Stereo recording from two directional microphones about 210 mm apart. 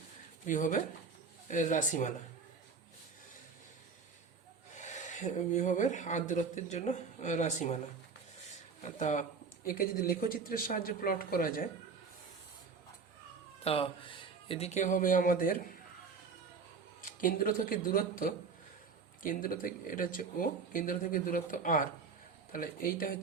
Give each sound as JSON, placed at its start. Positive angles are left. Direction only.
{"t": 0.4, "sound": "speech", "side_deg": 40}
{"t": 4.7, "sound": "speech", "side_deg": 35}
{"t": 8.8, "sound": "speech", "side_deg": 35}
{"t": 13.7, "sound": "speech", "side_deg": 25}
{"t": 17.0, "sound": "speech", "side_deg": 40}